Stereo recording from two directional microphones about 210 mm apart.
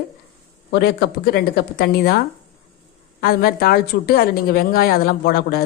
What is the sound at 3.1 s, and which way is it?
A woman's voice, 45° left (ahead or behind).